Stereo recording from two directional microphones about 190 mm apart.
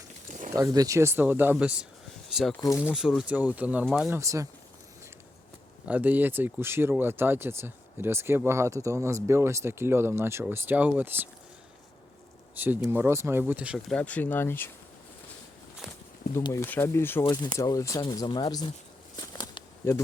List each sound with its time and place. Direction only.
0.5 s speech: 20° right (ahead or behind); by 2.6 s centre (ahead or behind)
2.6 s speech: 15° left (ahead or behind)
2.8 s speech: 5° right (ahead or behind)
5.9 s speech: 10° right (ahead or behind)
12.5 s speech: 10° right (ahead or behind); by 14.7 s 10° left (ahead or behind)
16.3 s speech: 15° left (ahead or behind)
17.2 s speech: 25° left (ahead or behind)
19.1 s a sound: 20° left (ahead or behind)